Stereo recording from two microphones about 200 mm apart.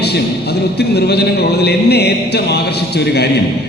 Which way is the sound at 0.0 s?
55° left (ahead or behind).